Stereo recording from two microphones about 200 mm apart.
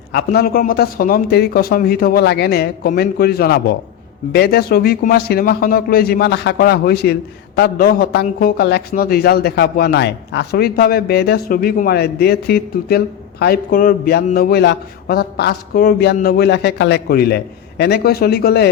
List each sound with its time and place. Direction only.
0.1 s a man's voice: 55° left (ahead or behind)